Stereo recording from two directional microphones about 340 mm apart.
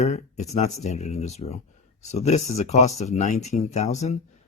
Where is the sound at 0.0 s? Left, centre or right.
Centre.